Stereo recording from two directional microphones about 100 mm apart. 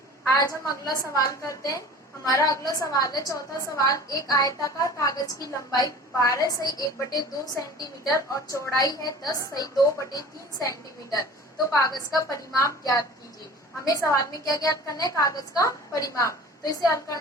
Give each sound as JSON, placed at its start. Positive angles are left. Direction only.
{"t": 0.3, "sound": "a woman's voice", "side_deg": 35}